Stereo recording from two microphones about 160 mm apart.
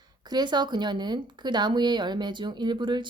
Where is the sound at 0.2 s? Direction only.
25° right (ahead or behind).